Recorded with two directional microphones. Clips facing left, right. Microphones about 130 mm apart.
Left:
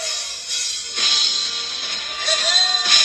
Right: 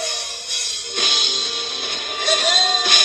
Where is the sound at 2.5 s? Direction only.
55° right (ahead or behind).